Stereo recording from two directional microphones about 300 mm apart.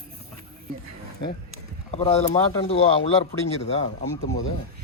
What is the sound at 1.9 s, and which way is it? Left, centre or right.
Speech, left.